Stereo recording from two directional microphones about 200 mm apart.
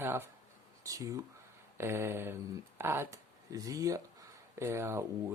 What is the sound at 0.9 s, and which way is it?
Speech, 15° right (ahead or behind).